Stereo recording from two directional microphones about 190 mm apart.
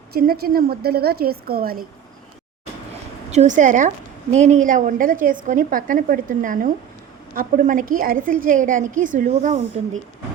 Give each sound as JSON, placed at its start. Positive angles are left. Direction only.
{"t": 0.1, "sound": "a woman's voice", "side_deg": -50}
{"t": 3.3, "sound": "a woman's voice", "side_deg": -40}